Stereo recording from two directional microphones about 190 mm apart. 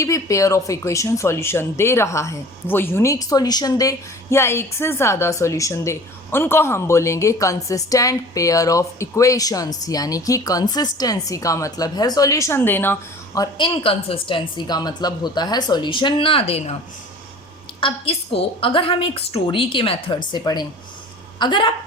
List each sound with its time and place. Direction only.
0.0 s speech: 15° left (ahead or behind); by 16.7 s 30° left (ahead or behind)
17.7 s a woman's voice: 30° left (ahead or behind)